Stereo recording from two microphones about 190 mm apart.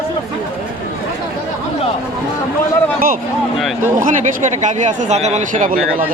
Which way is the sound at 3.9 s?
45° right (ahead or behind).